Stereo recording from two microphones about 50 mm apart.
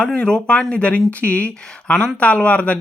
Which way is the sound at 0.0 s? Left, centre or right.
Centre.